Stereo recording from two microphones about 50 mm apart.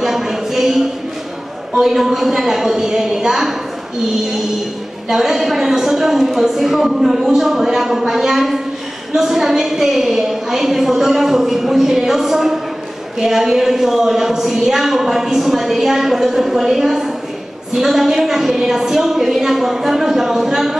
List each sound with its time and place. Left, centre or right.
0.0 s a sound: centre
1.8 s speech: centre
5.1 s speech: centre